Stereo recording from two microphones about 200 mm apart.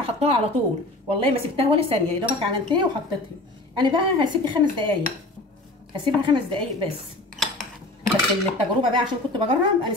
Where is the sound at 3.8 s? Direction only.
25° right (ahead or behind).